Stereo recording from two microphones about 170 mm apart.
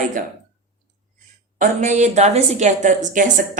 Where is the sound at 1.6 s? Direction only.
45° right (ahead or behind).